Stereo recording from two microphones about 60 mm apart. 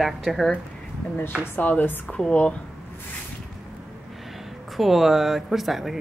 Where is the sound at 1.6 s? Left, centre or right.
Left.